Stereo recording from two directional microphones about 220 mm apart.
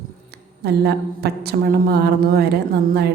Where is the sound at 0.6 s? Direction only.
45° right (ahead or behind).